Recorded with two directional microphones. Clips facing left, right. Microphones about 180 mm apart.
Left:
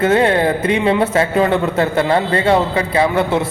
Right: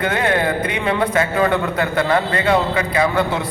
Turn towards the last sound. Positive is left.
turn(degrees=25)  # may be behind; listen again after turning